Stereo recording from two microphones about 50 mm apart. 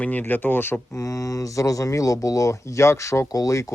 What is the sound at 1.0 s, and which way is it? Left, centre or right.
Speech, left.